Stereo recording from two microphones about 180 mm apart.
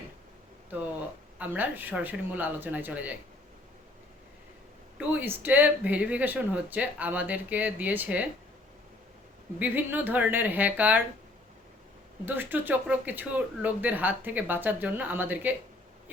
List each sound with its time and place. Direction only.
1.4 s speech: 10° right (ahead or behind)
4.9 s speech: 10° right (ahead or behind)
9.6 s speech: 10° right (ahead or behind)
12.2 s speech: 10° right (ahead or behind)